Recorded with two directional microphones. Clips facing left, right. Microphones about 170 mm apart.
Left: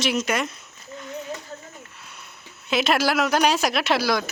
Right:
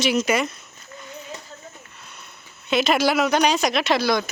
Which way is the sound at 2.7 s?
Centre (ahead or behind).